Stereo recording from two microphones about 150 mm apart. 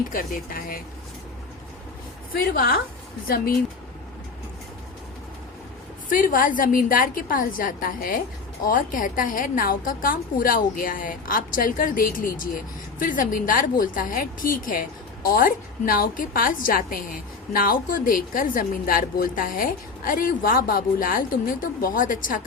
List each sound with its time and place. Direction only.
0.1 s a woman's voice: 70° left (ahead or behind)
2.3 s a woman's voice: 75° left (ahead or behind)
6.1 s a woman's voice: 65° left (ahead or behind)